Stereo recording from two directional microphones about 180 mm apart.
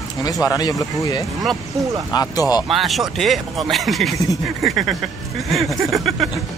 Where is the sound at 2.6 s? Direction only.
Centre (ahead or behind).